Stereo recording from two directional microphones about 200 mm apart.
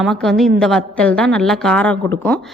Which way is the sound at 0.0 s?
Centre (ahead or behind).